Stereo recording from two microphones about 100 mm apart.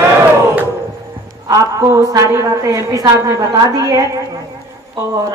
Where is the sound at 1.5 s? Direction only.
35° right (ahead or behind).